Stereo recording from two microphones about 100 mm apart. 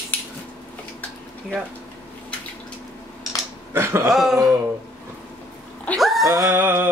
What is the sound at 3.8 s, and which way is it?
Speech, 25° right (ahead or behind).